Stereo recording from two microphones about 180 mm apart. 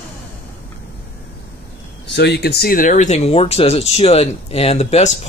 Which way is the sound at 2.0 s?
70° left (ahead or behind).